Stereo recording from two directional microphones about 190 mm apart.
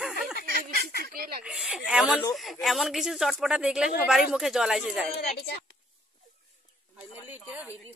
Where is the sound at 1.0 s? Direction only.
50° right (ahead or behind).